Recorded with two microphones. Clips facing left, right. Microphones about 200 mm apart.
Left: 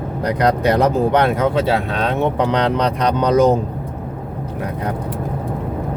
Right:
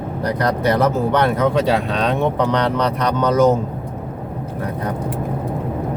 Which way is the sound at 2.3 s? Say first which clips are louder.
Left 1 dB; 15° left (ahead or behind).